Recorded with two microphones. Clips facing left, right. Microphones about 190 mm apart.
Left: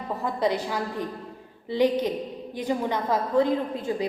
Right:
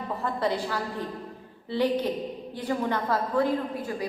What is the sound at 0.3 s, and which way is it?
A woman's voice, 15° left (ahead or behind).